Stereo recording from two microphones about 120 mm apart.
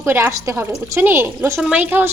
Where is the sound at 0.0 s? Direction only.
20° right (ahead or behind).